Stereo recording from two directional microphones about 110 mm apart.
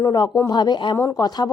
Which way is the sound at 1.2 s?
40° left (ahead or behind).